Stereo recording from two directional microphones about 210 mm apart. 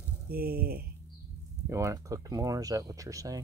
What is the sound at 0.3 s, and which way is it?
Speech, 45° right (ahead or behind).